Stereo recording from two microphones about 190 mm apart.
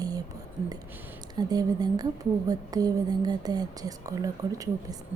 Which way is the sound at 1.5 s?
20° right (ahead or behind).